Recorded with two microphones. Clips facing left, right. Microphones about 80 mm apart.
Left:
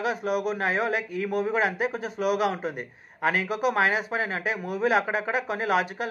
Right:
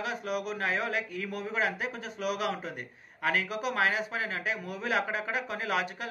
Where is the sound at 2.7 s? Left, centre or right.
Left.